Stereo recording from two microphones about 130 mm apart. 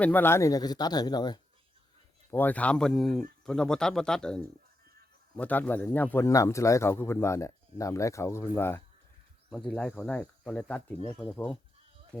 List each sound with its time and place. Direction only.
0.0 s speech: 15° left (ahead or behind); by 1.4 s 35° left (ahead or behind)
2.3 s speech: 15° left (ahead or behind)
9.5 s speech: 5° left (ahead or behind)